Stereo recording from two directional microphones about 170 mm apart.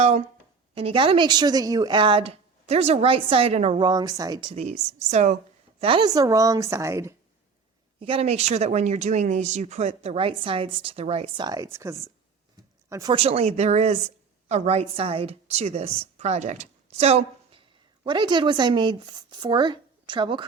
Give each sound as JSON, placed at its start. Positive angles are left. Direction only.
{"t": 0.0, "sound": "speech", "side_deg": -40}
{"t": 4.5, "sound": "speech", "side_deg": -40}
{"t": 5.8, "sound": "speech", "side_deg": -30}
{"t": 7.9, "sound": "a woman's voice", "side_deg": -35}
{"t": 13.1, "sound": "speech", "side_deg": -35}